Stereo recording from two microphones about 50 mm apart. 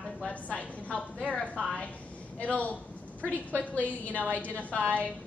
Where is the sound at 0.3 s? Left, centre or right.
Left.